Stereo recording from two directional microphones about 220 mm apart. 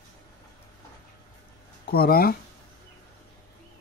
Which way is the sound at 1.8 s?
45° left (ahead or behind).